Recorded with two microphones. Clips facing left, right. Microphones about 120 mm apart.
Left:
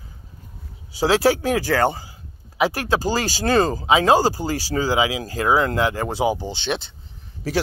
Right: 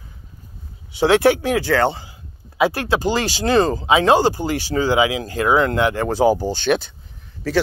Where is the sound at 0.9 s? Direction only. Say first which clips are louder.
Right 3 dB; 30° left (ahead or behind).